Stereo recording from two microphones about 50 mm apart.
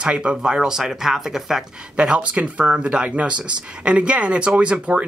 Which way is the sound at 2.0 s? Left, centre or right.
Right.